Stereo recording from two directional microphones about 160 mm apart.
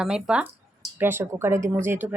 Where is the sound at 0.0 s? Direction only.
5° right (ahead or behind).